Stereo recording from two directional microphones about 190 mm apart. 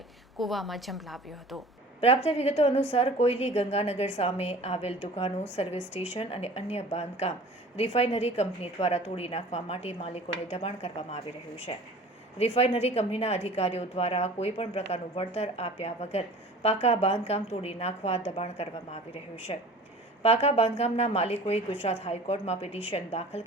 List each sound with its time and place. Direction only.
0.3 s a woman's voice: centre (ahead or behind)
2.0 s a woman's voice: 30° left (ahead or behind)